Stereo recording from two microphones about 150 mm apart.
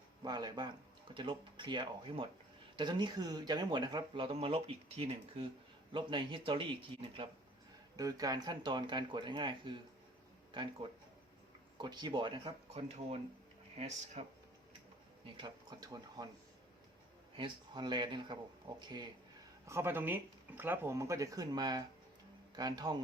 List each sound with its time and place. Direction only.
0.2 s speech: 30° right (ahead or behind)
7.9 s speech: 25° right (ahead or behind)
11.8 s speech: 30° right (ahead or behind)
13.7 s speech: 50° right (ahead or behind)
15.4 s speech: 25° right (ahead or behind)
17.3 s speech: 30° right (ahead or behind)
19.6 s speech: 15° right (ahead or behind)